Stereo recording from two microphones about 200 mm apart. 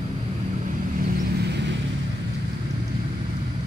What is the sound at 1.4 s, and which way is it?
Vehicle, 60° right (ahead or behind).